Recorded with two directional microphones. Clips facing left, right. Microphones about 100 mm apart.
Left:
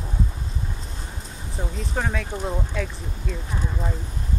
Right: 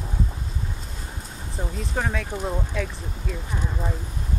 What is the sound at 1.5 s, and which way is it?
Speech, centre (ahead or behind).